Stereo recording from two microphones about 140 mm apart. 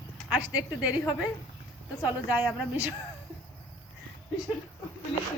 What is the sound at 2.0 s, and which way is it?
Speech, 10° right (ahead or behind).